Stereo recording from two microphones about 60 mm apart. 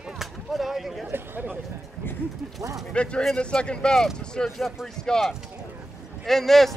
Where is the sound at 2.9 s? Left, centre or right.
Centre.